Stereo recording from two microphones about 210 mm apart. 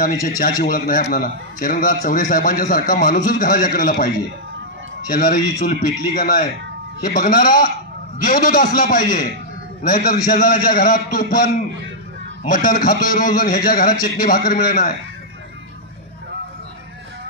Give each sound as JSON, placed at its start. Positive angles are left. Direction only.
{"t": 0.7, "sound": "a man's voice", "side_deg": 40}